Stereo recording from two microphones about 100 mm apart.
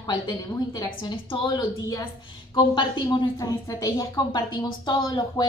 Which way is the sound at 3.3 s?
35° left (ahead or behind).